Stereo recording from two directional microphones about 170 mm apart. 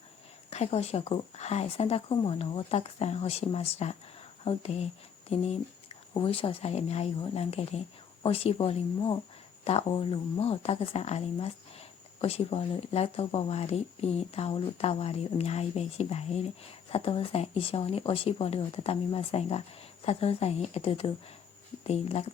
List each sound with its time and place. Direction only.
0.5 s speech: 40° left (ahead or behind)